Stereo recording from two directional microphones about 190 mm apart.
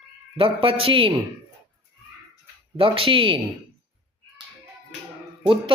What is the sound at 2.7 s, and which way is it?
Speech, 30° right (ahead or behind).